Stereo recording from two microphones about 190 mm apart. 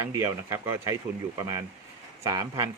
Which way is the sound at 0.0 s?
15° right (ahead or behind).